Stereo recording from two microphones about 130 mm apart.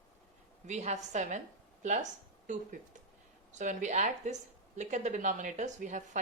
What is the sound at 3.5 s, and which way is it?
Speech, 75° right (ahead or behind).